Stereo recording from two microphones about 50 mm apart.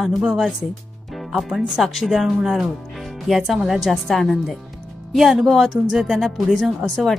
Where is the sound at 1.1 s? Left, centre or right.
Centre.